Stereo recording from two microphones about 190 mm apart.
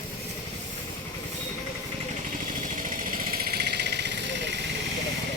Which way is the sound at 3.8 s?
60° right (ahead or behind).